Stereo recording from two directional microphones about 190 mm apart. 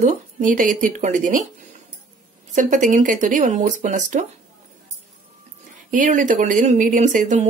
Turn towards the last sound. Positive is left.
turn(degrees=-40)  # may be behind; listen again after turning